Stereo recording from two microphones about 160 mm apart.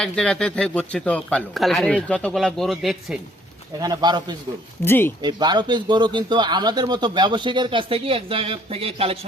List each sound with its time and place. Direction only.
0.0 s speech: 5° left (ahead or behind)
3.8 s a man's voice: 25° right (ahead or behind)
4.9 s speech: 15° left (ahead or behind)
5.2 s a man's voice: 25° right (ahead or behind)